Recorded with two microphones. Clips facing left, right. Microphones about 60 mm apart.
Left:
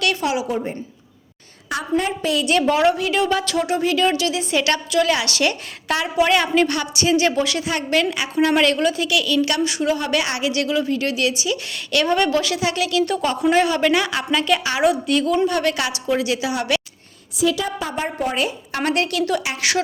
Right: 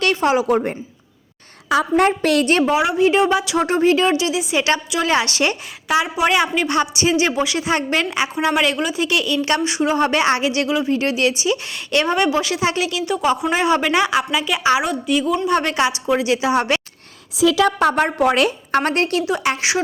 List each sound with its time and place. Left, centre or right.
0.0 s a woman's voice: right
0.4 s a woman's voice: right
2.0 s a woman's voice: right
2.6 s speech: centre
3.0 s a woman's voice: right
3.2 s speech: centre
3.6 s a woman's voice: right
4.1 s a woman's voice: centre
6.7 s a woman's voice: right
9.0 s a woman's voice: right
14.3 s a woman's voice: centre
15.4 s a woman's voice: right
17.6 s a woman's voice: right
18.7 s a woman's voice: right